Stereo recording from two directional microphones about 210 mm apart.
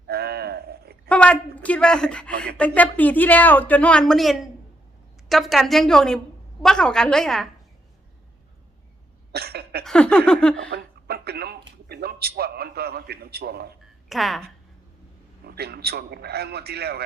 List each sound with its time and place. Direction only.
0.1 s livestock: 50° right (ahead or behind)
1.0 s a sound: 5° left (ahead or behind)
2.6 s a woman's voice: 5° left (ahead or behind)
9.3 s cough: 50° right (ahead or behind)
9.8 s a woman's voice: 5° left (ahead or behind)
10.7 s speech: 50° right (ahead or behind)
14.1 s a woman's voice: centre (ahead or behind)
15.4 s a man's voice: 50° right (ahead or behind)